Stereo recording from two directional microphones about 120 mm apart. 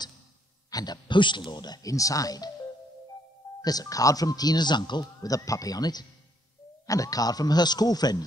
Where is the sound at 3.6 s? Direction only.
30° left (ahead or behind).